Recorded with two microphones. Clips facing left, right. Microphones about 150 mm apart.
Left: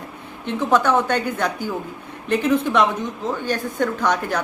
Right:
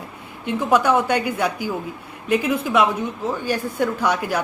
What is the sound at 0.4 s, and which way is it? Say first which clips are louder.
A woman's voice: right 1 dB; 10° right (ahead or behind).